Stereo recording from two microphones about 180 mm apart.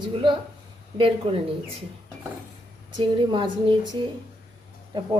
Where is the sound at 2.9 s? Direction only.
25° right (ahead or behind).